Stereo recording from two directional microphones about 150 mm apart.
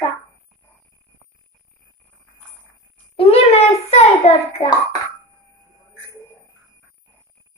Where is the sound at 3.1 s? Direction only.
40° left (ahead or behind).